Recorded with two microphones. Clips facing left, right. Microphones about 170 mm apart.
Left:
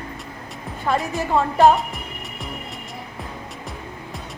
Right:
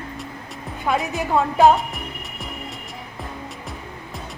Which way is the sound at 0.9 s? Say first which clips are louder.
Even; centre (ahead or behind).